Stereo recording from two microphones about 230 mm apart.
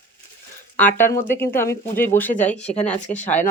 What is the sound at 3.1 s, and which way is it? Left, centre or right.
Speech, left.